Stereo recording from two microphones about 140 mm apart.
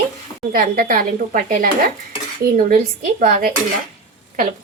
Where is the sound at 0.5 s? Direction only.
75° right (ahead or behind).